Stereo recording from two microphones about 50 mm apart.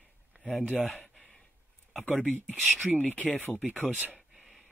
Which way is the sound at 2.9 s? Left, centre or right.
Left.